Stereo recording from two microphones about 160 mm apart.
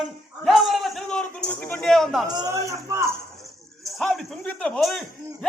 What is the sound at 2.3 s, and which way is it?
Speech, 20° right (ahead or behind).